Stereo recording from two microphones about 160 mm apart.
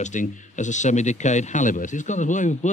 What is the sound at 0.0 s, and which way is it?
Speech, 50° left (ahead or behind).